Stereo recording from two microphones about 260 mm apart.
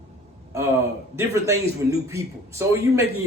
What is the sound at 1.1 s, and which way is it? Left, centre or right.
A man's voice, centre.